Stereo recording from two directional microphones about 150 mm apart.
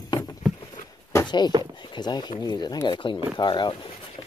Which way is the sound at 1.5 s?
25° right (ahead or behind).